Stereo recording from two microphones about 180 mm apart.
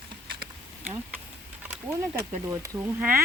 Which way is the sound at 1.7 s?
10° right (ahead or behind).